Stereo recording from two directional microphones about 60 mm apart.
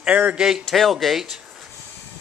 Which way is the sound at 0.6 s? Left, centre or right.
Centre.